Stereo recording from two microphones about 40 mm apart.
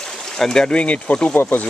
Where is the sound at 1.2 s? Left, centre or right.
Left.